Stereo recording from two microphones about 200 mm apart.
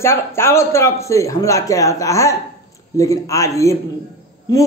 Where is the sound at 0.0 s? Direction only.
10° left (ahead or behind).